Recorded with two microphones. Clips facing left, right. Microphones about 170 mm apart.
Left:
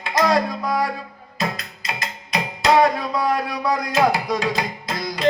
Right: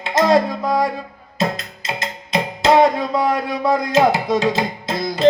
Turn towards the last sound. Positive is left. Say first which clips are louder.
# right 6 dB
turn(degrees=-25)  # may be behind; listen again after turning